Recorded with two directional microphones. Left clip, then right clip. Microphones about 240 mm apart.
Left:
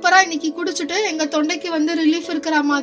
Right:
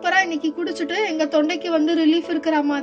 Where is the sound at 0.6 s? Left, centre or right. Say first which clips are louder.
Left 3 dB; centre.